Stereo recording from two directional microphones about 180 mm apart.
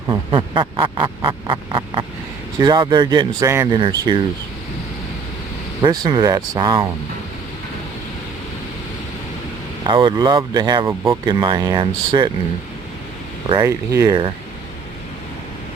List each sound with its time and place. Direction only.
0.1 s speech: 25° right (ahead or behind)
3.8 s speech: 30° right (ahead or behind)
5.8 s speech: 25° right (ahead or behind)
9.8 s speech: 25° right (ahead or behind)
13.5 s speech: 20° right (ahead or behind)